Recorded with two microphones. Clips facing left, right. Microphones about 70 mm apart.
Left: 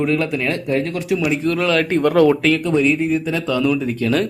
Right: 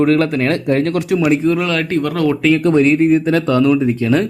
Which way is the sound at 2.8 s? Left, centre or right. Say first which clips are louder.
Right 5 dB; right.